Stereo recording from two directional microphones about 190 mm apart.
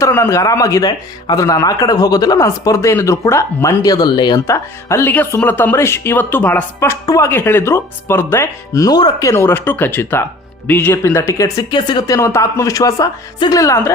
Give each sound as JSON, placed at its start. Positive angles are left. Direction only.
{"t": 0.0, "sound": "speech", "side_deg": 15}